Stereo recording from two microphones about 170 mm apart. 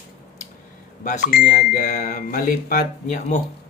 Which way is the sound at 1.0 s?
45° left (ahead or behind).